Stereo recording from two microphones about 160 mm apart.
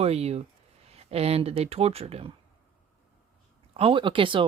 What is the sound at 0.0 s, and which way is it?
Speech, 40° right (ahead or behind).